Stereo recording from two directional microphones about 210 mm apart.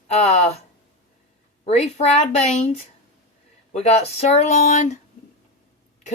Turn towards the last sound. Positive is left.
turn(degrees=35)  # may be behind; listen again after turning